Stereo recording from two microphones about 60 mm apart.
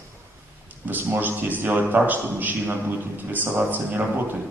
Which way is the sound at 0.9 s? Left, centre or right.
Right.